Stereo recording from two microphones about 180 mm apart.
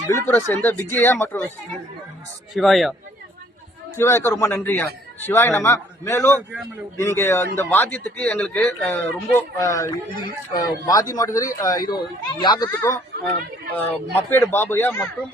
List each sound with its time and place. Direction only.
0.1 s speech: 15° left (ahead or behind)
2.6 s speech: centre (ahead or behind)
3.9 s speech: 15° left (ahead or behind)